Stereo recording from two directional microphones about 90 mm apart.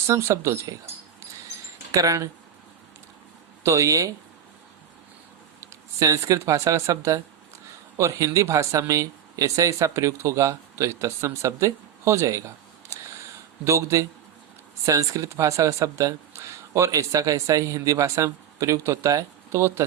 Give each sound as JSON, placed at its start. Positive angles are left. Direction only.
{"t": 0.1, "sound": "speech", "side_deg": -30}
{"t": 1.9, "sound": "speech", "side_deg": -40}
{"t": 3.6, "sound": "speech", "side_deg": -35}
{"t": 5.5, "sound": "speech", "side_deg": -35}
{"t": 13.7, "sound": "speech", "side_deg": -35}